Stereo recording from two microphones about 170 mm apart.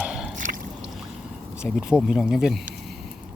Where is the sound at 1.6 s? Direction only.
5° right (ahead or behind).